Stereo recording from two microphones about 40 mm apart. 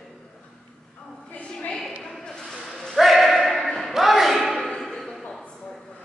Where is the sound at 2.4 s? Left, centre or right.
Centre.